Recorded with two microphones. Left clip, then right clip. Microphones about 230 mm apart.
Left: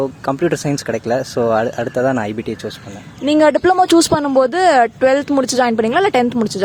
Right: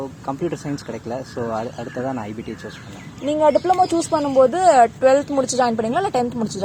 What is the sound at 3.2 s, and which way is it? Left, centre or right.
Speech, left.